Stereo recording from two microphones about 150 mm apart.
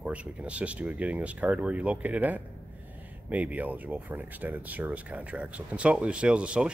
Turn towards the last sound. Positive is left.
turn(degrees=-5)  # may be behind; listen again after turning